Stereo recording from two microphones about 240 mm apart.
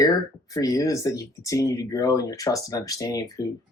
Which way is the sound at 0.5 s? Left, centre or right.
Centre.